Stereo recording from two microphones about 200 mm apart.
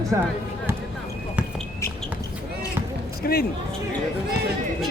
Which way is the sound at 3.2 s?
50° left (ahead or behind).